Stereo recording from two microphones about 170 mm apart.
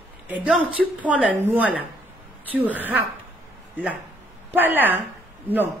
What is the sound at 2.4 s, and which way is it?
Speech, 10° right (ahead or behind).